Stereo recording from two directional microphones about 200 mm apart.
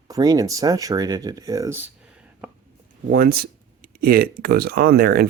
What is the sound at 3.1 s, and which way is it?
Speech, 45° right (ahead or behind).